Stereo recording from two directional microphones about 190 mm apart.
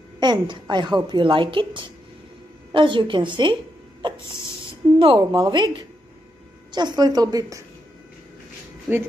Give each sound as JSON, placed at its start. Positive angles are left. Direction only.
{"t": 0.2, "sound": "a woman's voice", "side_deg": -25}
{"t": 4.9, "sound": "a woman's voice", "side_deg": -30}
{"t": 8.9, "sound": "speech", "side_deg": -10}